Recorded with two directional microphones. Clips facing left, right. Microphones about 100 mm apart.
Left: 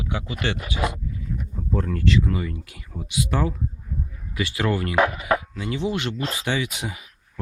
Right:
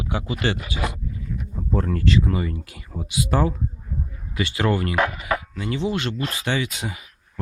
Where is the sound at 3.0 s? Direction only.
5° right (ahead or behind).